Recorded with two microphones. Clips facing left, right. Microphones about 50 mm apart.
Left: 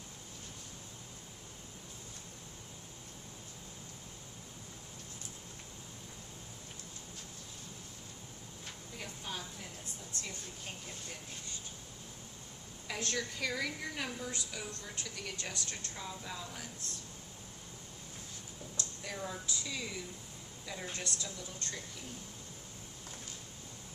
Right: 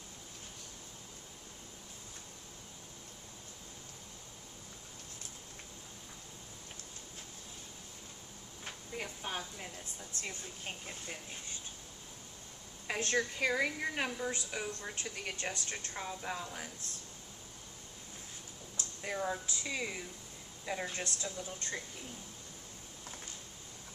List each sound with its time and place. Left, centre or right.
8.6 s a sound: right
10.2 s a woman's voice: right
12.9 s a woman's voice: right
18.8 s a woman's voice: right